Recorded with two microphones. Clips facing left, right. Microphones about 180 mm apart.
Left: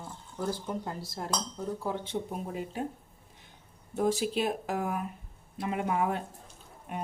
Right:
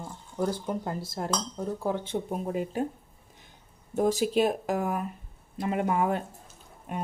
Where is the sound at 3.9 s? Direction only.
40° right (ahead or behind).